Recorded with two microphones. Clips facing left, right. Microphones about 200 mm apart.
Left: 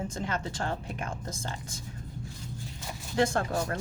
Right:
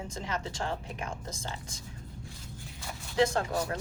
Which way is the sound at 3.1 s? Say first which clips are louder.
Even; 50° left (ahead or behind).